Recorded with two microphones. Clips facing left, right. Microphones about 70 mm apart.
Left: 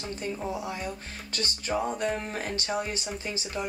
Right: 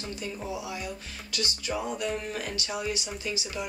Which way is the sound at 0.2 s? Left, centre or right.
Left.